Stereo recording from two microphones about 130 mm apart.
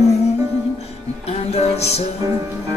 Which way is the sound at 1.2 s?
55° left (ahead or behind).